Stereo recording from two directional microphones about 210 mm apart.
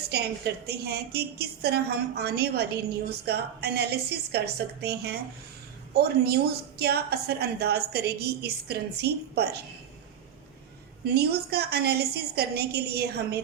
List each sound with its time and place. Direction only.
0.1 s a woman's voice: 50° right (ahead or behind)
11.1 s a woman's voice: 50° right (ahead or behind)